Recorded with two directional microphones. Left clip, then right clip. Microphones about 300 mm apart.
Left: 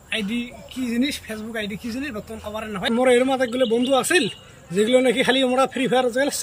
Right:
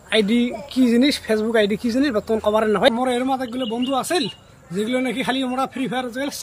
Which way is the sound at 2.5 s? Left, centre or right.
Right.